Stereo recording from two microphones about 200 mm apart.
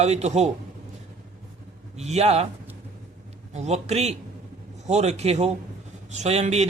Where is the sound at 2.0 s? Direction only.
35° right (ahead or behind).